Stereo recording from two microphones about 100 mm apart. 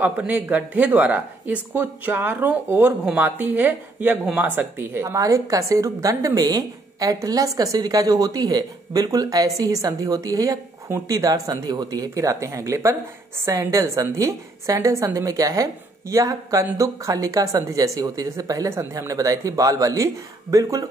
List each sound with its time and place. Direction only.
0.2 s speech: 15° right (ahead or behind)
5.1 s a woman's voice: 35° right (ahead or behind)